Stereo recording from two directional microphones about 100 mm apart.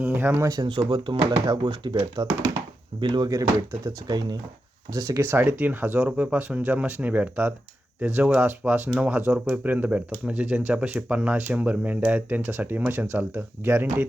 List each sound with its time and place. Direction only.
0.0 s speech: 15° right (ahead or behind)
0.4 s speech: 40° right (ahead or behind)
0.9 s speech: 55° right (ahead or behind); by 5.2 s 35° right (ahead or behind)
5.2 s speech: 20° right (ahead or behind)